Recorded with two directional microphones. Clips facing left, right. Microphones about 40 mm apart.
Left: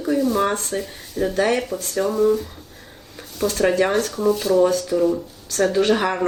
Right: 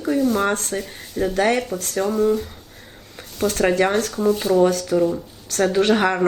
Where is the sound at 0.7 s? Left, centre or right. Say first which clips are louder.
Even; centre.